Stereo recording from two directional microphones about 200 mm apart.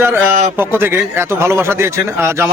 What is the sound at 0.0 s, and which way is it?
A man's voice, 10° right (ahead or behind).